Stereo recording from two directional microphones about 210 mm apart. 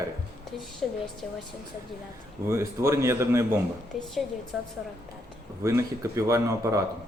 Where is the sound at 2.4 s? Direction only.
15° right (ahead or behind).